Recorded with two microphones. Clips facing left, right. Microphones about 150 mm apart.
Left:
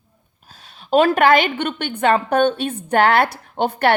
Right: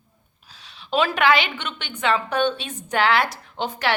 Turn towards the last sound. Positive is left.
turn(degrees=55)  # may be behind; listen again after turning